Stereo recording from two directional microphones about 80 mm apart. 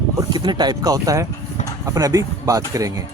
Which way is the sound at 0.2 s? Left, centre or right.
Right.